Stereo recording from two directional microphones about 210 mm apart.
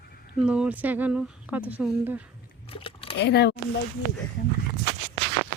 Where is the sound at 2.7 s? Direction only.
25° left (ahead or behind).